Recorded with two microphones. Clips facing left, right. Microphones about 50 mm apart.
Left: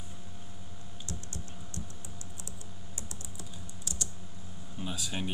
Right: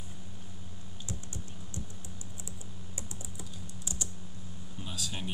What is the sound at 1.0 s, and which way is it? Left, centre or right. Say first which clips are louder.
Computer keyboard: even; centre.